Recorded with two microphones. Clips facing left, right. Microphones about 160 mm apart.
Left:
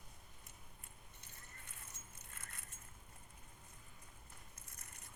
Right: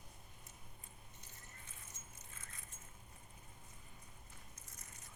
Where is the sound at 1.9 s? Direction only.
65° left (ahead or behind).